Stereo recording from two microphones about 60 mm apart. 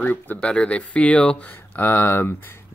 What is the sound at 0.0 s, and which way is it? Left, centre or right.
Speech, left.